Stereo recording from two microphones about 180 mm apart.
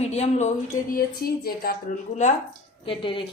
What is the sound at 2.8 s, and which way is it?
Speech, 30° left (ahead or behind).